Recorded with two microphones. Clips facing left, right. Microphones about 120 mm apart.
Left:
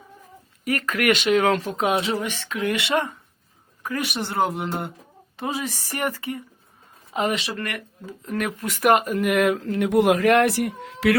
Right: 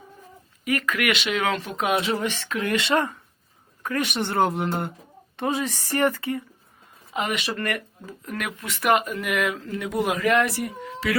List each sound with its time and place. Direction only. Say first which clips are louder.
0.6 s speech: left 2 dB; 35° left (ahead or behind)
2.2 s speech: left 1 dB; 15° left (ahead or behind)
4.1 s speech: right 1 dB; centre (ahead or behind)
5.9 s speech: right 5 dB; 15° left (ahead or behind)
7.2 s speech: left 3 dB; 35° left (ahead or behind)
7.5 s speech: right 3 dB; 5° left (ahead or behind)
8.0 s speech: left 9 dB; 30° left (ahead or behind); by 9.6 s 50° left (ahead or behind)
9.6 s speech: left 7 dB; 65° left (ahead or behind)